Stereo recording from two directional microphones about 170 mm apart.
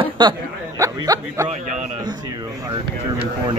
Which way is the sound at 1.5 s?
45° right (ahead or behind).